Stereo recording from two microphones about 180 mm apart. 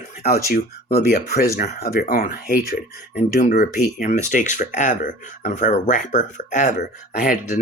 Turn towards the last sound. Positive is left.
turn(degrees=45)  # may be behind; listen again after turning